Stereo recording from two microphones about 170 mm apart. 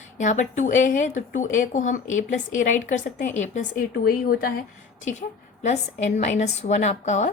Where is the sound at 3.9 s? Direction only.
65° left (ahead or behind).